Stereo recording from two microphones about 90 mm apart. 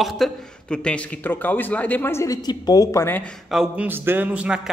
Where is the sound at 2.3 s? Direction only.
45° left (ahead or behind).